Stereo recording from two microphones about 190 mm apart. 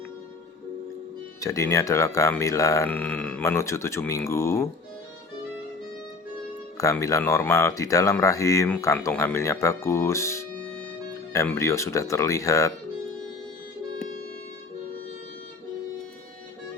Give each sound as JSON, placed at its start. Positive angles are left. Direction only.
{"t": 1.4, "sound": "speech", "side_deg": 15}
{"t": 6.7, "sound": "speech", "side_deg": 15}